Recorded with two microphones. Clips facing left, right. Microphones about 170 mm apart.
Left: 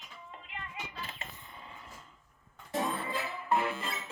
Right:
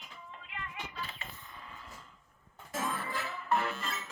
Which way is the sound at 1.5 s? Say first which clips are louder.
Even; 25° left (ahead or behind).